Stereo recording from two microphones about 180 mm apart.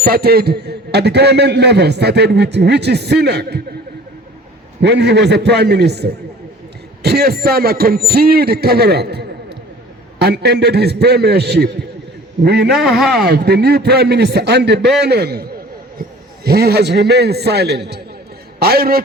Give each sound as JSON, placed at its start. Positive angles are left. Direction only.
{"t": 0.0, "sound": "a man's voice", "side_deg": -60}
{"t": 4.8, "sound": "a man's voice", "side_deg": -70}
{"t": 12.7, "sound": "speech", "side_deg": 0}
{"t": 13.2, "sound": "a man's voice", "side_deg": -60}